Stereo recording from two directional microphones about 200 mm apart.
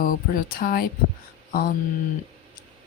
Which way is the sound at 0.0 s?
45° left (ahead or behind).